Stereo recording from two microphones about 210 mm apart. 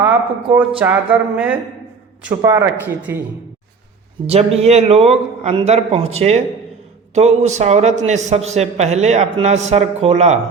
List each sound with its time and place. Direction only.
0.0 s speech: 5° right (ahead or behind)
4.3 s a man's voice: 30° right (ahead or behind)